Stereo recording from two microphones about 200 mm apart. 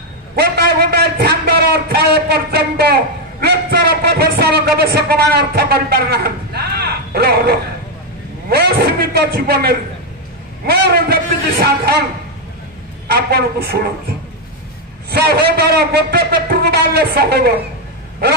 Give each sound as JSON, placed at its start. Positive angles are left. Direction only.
{"t": 0.4, "sound": "a sound", "side_deg": -50}
{"t": 8.5, "sound": "a man's voice", "side_deg": -50}
{"t": 13.1, "sound": "a man's voice", "side_deg": -50}
{"t": 15.0, "sound": "a man's voice", "side_deg": -55}